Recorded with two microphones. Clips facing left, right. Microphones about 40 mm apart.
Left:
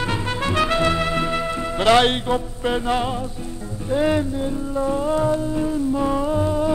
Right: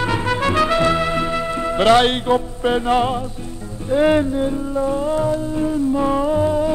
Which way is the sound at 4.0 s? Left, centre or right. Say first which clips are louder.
Right 5 dB; right.